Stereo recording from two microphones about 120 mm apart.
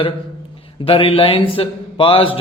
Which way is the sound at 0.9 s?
50° left (ahead or behind).